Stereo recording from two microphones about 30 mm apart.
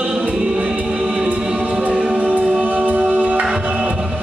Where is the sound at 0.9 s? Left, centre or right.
Right.